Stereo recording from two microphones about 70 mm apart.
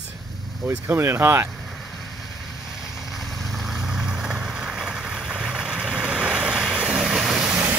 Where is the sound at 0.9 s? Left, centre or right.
Right.